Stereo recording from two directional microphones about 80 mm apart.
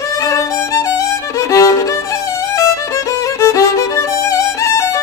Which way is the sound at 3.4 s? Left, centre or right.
Left.